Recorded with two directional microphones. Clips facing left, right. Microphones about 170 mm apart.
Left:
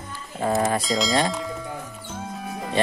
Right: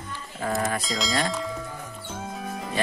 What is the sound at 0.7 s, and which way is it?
Speech, centre (ahead or behind).